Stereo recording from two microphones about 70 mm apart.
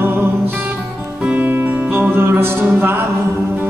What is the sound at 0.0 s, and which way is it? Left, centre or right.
Music, right.